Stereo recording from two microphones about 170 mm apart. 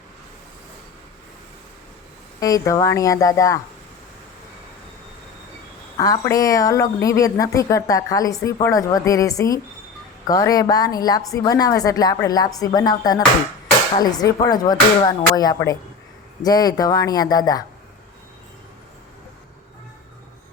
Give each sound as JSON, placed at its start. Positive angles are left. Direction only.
{"t": 2.4, "sound": "a woman's voice", "side_deg": 20}
{"t": 6.0, "sound": "a woman's voice", "side_deg": 20}